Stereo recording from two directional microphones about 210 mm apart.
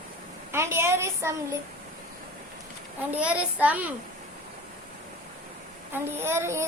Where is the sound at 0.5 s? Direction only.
10° right (ahead or behind).